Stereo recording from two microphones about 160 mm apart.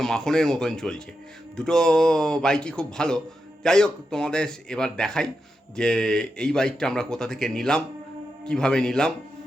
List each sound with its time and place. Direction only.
0.0 s speech: 5° left (ahead or behind)